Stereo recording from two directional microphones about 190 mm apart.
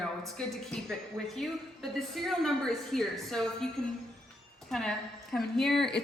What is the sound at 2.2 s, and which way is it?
A woman's voice, centre (ahead or behind).